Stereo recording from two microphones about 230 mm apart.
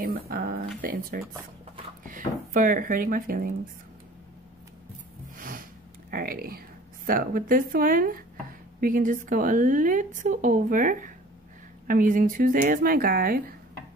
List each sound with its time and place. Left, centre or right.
0.0 s a woman's voice: right
5.4 s sniff: right
7.1 s a woman's voice: right